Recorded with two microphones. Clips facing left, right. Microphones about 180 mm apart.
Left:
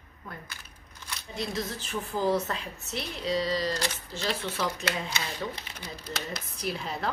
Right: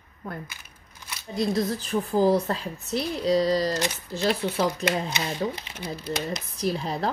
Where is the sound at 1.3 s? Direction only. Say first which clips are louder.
Right 8 dB; 35° right (ahead or behind).